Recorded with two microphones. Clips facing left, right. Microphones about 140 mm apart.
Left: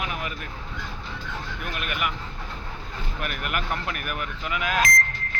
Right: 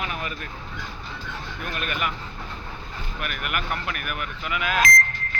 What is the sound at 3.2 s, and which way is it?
Speech, 35° left (ahead or behind).